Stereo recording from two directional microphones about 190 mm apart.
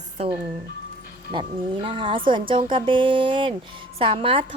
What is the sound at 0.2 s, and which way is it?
A woman's voice, 30° right (ahead or behind).